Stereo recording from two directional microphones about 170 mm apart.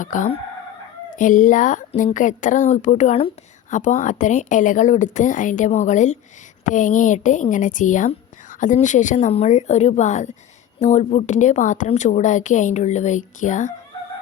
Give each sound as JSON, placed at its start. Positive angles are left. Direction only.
{"t": 0.0, "sound": "a woman's voice", "side_deg": 50}